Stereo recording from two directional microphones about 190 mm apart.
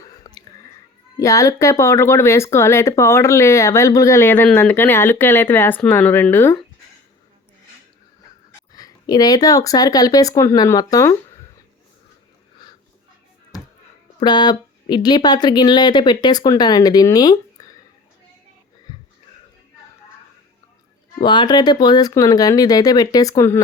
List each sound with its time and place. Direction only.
0.0 s chewing: 20° left (ahead or behind)
1.1 s speech: 15° left (ahead or behind)
8.7 s speech: 20° left (ahead or behind)
14.2 s speech: 25° left (ahead or behind)
17.6 s a sound: 20° left (ahead or behind)
21.2 s speech: 25° left (ahead or behind)